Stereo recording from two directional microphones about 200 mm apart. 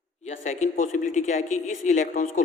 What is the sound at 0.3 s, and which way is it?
Speech, 35° left (ahead or behind).